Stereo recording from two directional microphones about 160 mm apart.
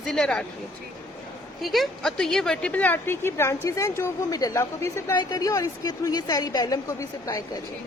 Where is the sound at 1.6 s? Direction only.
Centre (ahead or behind).